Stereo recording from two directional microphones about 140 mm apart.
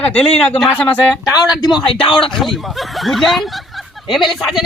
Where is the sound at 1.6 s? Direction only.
35° left (ahead or behind).